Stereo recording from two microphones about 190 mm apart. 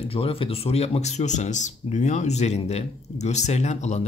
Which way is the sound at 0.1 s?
30° left (ahead or behind).